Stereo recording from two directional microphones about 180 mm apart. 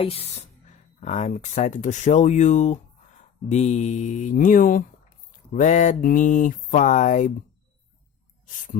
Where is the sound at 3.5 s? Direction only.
40° left (ahead or behind).